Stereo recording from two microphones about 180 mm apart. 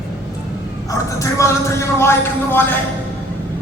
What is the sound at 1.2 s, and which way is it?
Speech, 15° left (ahead or behind).